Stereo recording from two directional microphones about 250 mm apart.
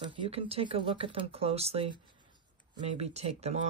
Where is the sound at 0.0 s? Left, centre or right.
Centre.